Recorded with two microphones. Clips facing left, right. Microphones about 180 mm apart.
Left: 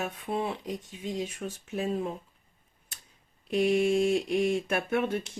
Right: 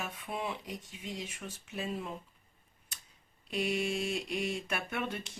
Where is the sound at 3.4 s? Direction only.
50° left (ahead or behind).